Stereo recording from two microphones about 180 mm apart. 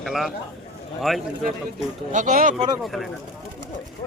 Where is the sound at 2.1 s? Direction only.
45° right (ahead or behind).